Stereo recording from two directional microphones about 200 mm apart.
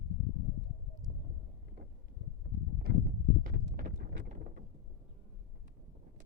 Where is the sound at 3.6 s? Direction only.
55° right (ahead or behind).